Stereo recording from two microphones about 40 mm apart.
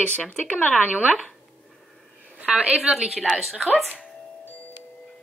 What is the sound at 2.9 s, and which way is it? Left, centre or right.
Speech, centre.